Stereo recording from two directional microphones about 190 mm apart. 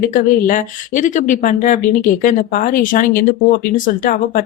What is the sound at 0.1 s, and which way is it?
Speech, 45° left (ahead or behind).